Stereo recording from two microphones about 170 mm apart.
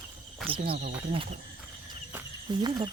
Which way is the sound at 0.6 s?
60° right (ahead or behind).